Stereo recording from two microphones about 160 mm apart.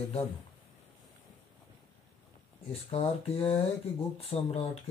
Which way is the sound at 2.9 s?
40° left (ahead or behind).